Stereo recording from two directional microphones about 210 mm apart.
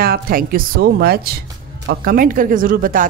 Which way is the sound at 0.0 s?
45° right (ahead or behind).